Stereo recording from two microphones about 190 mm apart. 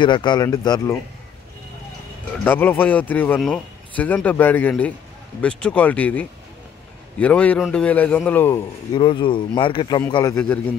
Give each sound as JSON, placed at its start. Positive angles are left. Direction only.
{"t": 0.0, "sound": "speech", "side_deg": 25}
{"t": 2.4, "sound": "speech", "side_deg": 10}
{"t": 8.9, "sound": "speech", "side_deg": 25}